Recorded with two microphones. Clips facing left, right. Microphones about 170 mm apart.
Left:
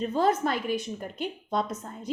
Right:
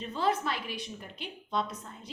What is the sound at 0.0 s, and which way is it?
A woman's voice, 45° left (ahead or behind).